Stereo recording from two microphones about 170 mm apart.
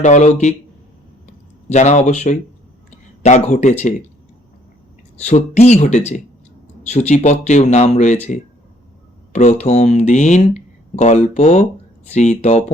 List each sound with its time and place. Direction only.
0.0 s speech: 45° left (ahead or behind)
1.7 s speech: 45° left (ahead or behind)
5.2 s speech: 40° left (ahead or behind)
9.3 s speech: 40° left (ahead or behind)